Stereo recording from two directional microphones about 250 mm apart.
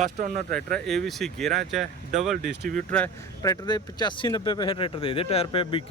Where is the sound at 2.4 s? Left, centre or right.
Right.